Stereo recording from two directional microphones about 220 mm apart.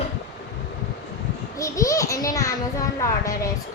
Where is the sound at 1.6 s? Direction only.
15° left (ahead or behind).